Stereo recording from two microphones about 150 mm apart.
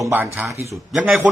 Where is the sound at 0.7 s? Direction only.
Centre (ahead or behind).